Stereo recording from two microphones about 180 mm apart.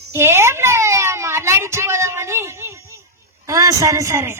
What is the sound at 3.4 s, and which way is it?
Speech, 20° right (ahead or behind).